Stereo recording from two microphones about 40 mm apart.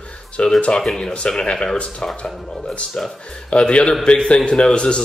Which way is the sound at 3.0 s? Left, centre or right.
Centre.